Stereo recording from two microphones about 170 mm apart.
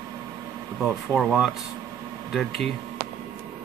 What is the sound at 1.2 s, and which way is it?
Speech, 5° right (ahead or behind).